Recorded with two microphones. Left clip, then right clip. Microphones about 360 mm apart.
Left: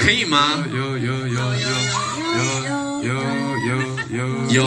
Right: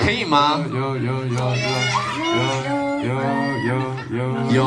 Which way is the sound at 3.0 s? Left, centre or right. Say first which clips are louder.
Right 2 dB; centre.